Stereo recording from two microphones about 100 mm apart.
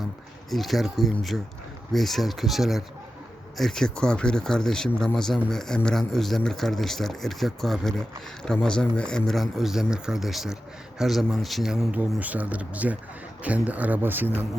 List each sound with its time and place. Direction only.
0.5 s speech: centre (ahead or behind)
11.9 s speech: 15° right (ahead or behind)